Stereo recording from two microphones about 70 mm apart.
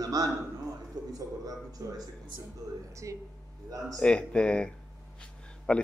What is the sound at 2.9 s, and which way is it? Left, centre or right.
Speech, right.